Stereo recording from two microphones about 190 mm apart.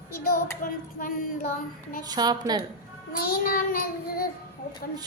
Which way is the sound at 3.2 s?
50° left (ahead or behind).